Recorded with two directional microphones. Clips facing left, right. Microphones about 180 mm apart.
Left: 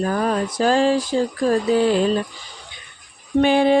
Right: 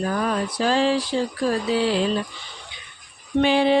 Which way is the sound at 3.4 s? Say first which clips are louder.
Left 3 dB; 50° left (ahead or behind).